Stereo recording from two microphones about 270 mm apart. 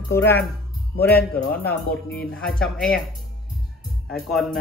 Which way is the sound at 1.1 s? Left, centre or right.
Left.